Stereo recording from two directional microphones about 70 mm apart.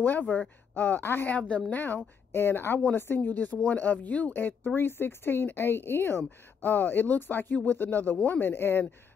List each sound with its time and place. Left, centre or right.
0.0 s speech: left